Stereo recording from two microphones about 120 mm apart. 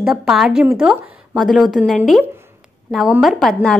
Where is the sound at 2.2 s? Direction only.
20° right (ahead or behind).